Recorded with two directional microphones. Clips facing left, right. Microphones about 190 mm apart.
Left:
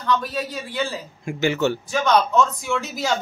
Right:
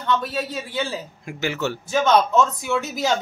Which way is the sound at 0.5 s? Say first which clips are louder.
Even; 25° right (ahead or behind).